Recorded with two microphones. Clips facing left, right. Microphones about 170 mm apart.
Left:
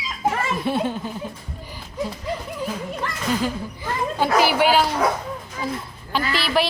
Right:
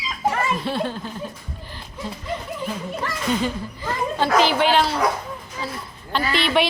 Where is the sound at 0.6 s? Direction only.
10° left (ahead or behind).